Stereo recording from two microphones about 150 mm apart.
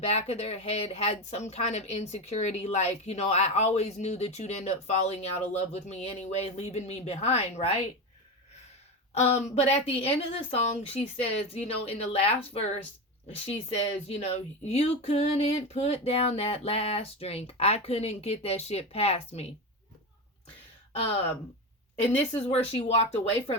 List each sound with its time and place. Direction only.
0.1 s speech: 45° left (ahead or behind)
9.1 s speech: 45° left (ahead or behind)
22.4 s speech: 40° left (ahead or behind)